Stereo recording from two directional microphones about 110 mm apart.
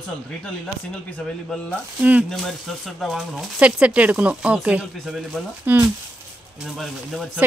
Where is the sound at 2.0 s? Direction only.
15° right (ahead or behind).